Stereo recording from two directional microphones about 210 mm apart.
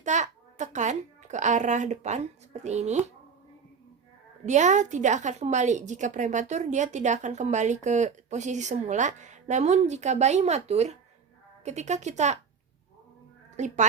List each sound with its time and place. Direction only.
0.0 s a child's voice: 35° right (ahead or behind)
4.4 s a woman's voice: 35° right (ahead or behind)
13.6 s a woman's voice: 35° right (ahead or behind)